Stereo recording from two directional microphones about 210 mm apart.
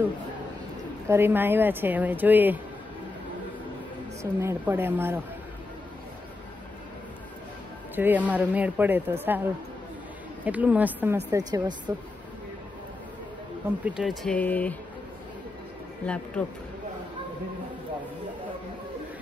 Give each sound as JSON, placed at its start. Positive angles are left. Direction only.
{"t": 1.0, "sound": "speech", "side_deg": -10}
{"t": 4.2, "sound": "speech", "side_deg": -15}
{"t": 7.9, "sound": "speech", "side_deg": -10}
{"t": 13.8, "sound": "speech", "side_deg": -5}
{"t": 16.4, "sound": "speech", "side_deg": 5}